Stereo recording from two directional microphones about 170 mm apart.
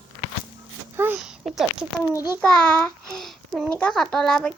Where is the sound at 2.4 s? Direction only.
5° left (ahead or behind).